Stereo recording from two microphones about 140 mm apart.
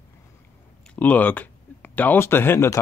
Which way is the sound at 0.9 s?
10° left (ahead or behind).